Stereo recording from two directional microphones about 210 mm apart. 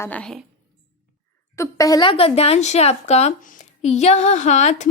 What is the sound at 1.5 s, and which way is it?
A woman's voice, 15° left (ahead or behind).